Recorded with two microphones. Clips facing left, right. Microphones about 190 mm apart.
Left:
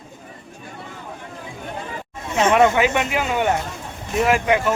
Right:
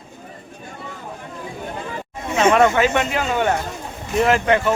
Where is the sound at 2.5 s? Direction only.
15° left (ahead or behind).